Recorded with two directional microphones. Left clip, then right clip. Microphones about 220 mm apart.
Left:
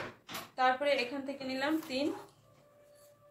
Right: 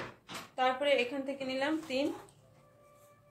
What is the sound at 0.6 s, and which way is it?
Speech, 35° right (ahead or behind).